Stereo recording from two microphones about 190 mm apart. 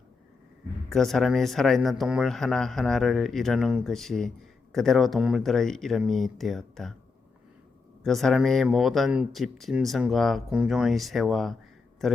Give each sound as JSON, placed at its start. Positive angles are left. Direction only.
{"t": 0.9, "sound": "speech", "side_deg": 0}
{"t": 8.0, "sound": "speech", "side_deg": 0}